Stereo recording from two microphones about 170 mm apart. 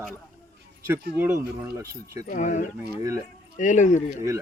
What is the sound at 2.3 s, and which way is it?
Speech, 45° left (ahead or behind).